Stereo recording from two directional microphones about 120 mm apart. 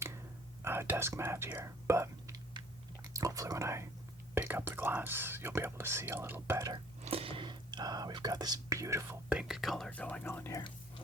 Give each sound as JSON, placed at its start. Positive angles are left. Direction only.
{"t": 0.6, "sound": "speech", "side_deg": -20}
{"t": 2.3, "sound": "chewing", "side_deg": -35}
{"t": 4.4, "sound": "speech", "side_deg": -15}
{"t": 7.0, "sound": "speech", "side_deg": -55}
{"t": 9.3, "sound": "speech", "side_deg": -5}